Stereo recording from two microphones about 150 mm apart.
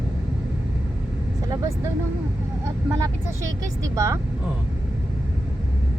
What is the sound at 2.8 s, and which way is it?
Vehicle, 20° right (ahead or behind).